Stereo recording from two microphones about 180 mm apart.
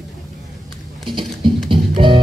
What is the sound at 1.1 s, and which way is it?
Music, 25° right (ahead or behind).